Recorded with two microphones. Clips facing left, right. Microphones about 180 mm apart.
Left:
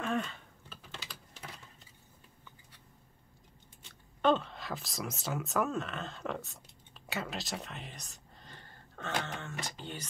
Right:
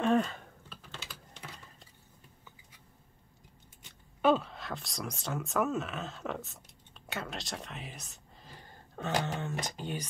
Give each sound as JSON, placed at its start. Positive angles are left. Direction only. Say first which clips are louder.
{"t": 0.0, "sound": "typing", "louder": "right 7 dB", "side_deg": -35}
{"t": 4.2, "sound": "speech", "louder": "right 2 dB", "side_deg": -5}